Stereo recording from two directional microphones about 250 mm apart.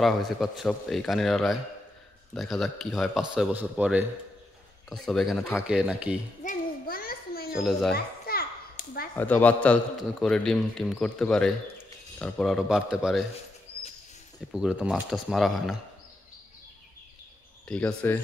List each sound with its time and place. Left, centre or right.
0.0 s a man's voice: centre
6.4 s a sound: left
7.5 s a man's voice: centre
7.9 s children playing: left
9.1 s a man's voice: centre
14.5 s a man's voice: centre
17.6 s a man's voice: centre